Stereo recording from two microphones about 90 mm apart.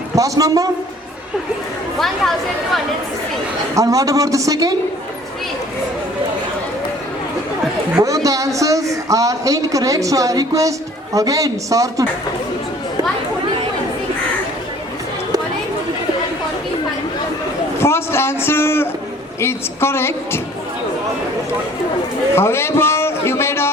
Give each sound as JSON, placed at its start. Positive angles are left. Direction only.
{"t": 0.2, "sound": "a woman's voice", "side_deg": -40}
{"t": 3.8, "sound": "a woman's voice", "side_deg": -40}
{"t": 7.9, "sound": "a woman's voice", "side_deg": -40}
{"t": 17.7, "sound": "a man's voice", "side_deg": 30}
{"t": 22.4, "sound": "a man's voice", "side_deg": 30}